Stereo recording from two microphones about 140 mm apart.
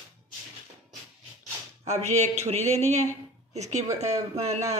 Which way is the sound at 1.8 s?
55° right (ahead or behind).